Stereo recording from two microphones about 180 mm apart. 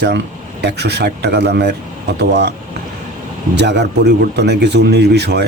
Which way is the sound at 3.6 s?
70° right (ahead or behind).